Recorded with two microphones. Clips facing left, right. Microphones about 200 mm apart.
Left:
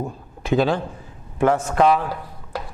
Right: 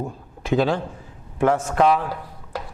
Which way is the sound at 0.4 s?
15° left (ahead or behind).